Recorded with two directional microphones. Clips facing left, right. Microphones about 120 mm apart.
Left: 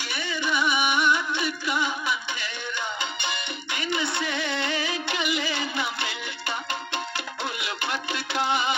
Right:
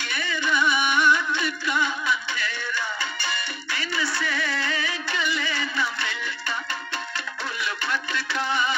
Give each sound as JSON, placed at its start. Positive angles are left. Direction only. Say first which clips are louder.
{"t": 0.0, "sound": "music", "louder": "right 1 dB", "side_deg": 10}
{"t": 7.8, "sound": "music", "louder": "left 1 dB", "side_deg": 25}